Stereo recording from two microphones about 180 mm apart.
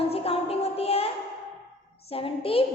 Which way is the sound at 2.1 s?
30° left (ahead or behind).